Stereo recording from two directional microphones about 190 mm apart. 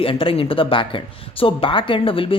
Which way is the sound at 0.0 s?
30° left (ahead or behind).